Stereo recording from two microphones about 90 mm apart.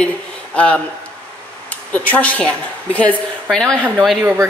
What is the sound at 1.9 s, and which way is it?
Speech, 15° left (ahead or behind).